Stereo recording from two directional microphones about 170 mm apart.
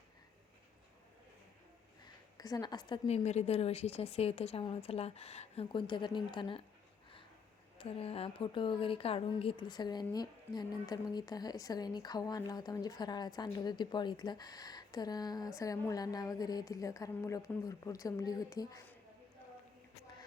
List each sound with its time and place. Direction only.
2.4 s a woman's voice: 25° left (ahead or behind)
3.1 s a woman's voice: 40° left (ahead or behind)
7.8 s a woman's voice: 35° left (ahead or behind)